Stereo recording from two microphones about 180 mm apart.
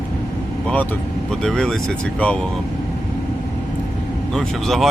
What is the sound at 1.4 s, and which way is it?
Speech, centre (ahead or behind).